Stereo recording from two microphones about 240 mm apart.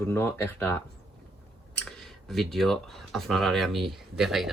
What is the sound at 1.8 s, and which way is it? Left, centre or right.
Speech, centre.